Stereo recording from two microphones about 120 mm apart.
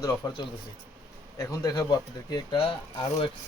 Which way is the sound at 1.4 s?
30° left (ahead or behind).